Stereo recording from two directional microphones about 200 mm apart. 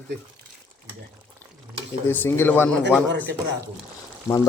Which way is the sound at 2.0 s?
10° left (ahead or behind).